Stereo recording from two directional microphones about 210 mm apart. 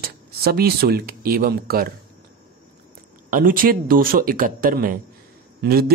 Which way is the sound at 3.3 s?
40° right (ahead or behind).